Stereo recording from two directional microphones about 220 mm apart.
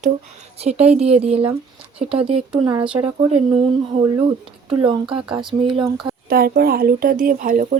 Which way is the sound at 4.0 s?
25° right (ahead or behind).